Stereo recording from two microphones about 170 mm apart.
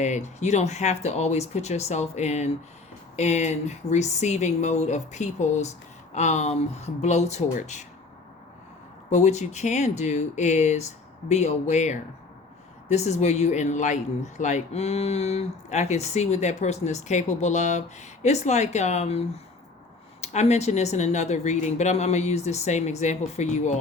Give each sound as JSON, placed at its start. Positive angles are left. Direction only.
{"t": 0.0, "sound": "speech", "side_deg": 45}
{"t": 9.0, "sound": "speech", "side_deg": 40}
{"t": 20.2, "sound": "speech", "side_deg": 40}